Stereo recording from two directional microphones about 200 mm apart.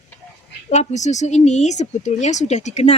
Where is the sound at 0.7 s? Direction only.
35° left (ahead or behind).